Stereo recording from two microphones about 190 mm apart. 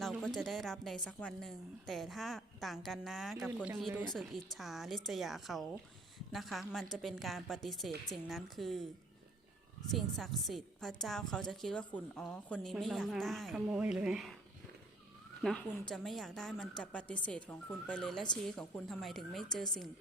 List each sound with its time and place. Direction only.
0.0 s a woman's voice: centre (ahead or behind)
9.9 s a woman's voice: centre (ahead or behind)
15.4 s a woman's voice: 5° left (ahead or behind)